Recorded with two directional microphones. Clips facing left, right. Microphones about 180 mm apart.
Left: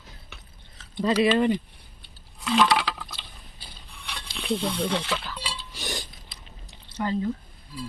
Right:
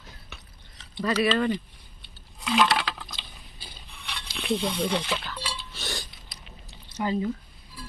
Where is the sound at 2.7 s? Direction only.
10° left (ahead or behind).